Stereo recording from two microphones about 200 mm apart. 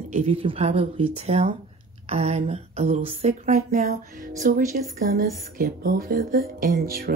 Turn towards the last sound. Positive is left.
turn(degrees=-50)  # may be behind; listen again after turning